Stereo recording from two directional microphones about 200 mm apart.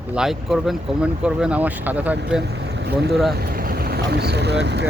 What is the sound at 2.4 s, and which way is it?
Speech, 60° right (ahead or behind).